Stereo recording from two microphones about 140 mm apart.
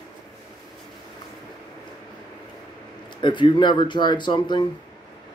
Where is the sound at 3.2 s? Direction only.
35° left (ahead or behind).